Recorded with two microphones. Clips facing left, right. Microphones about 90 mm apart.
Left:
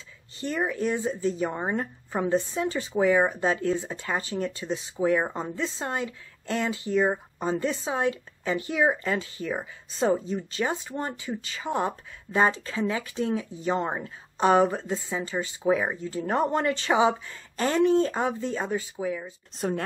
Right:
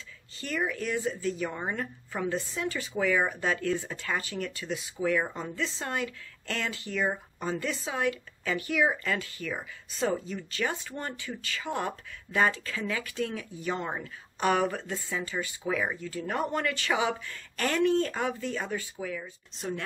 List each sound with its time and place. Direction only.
0.4 s speech: 25° left (ahead or behind)